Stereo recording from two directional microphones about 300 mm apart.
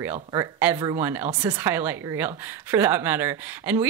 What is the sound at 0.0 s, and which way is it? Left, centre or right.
Speech, centre.